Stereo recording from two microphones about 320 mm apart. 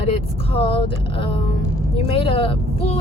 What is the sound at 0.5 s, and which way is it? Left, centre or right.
A woman's voice, centre.